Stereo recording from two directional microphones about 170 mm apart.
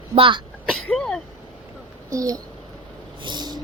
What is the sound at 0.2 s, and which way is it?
Vehicle, 30° right (ahead or behind).